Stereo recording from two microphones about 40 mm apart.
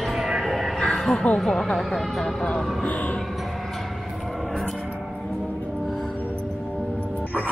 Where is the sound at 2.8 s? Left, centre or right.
Left.